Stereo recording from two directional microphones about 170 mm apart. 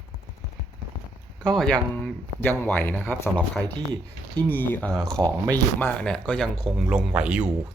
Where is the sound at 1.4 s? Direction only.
5° left (ahead or behind).